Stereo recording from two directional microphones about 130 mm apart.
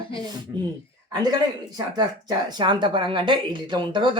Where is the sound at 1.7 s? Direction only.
30° right (ahead or behind).